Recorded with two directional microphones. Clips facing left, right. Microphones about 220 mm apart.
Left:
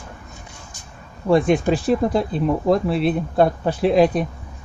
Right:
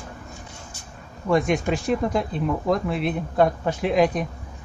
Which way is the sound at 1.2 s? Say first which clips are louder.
Left 5 dB; 30° left (ahead or behind).